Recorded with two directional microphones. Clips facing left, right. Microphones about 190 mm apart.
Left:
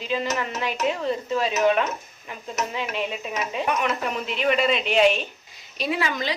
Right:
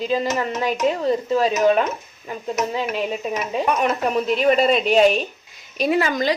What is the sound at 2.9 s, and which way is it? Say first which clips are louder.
A woman's voice: right 4 dB; 40° right (ahead or behind).